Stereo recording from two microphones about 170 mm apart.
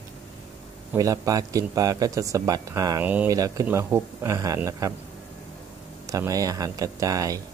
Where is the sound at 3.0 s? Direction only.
10° right (ahead or behind).